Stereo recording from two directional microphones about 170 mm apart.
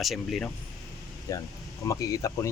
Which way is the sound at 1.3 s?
20° left (ahead or behind).